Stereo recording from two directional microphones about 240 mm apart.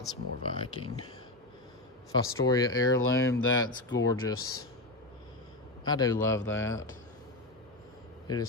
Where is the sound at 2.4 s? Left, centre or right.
Centre.